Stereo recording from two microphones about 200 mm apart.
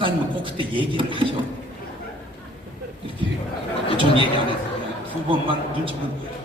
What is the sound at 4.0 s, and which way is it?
A man's voice, 25° right (ahead or behind).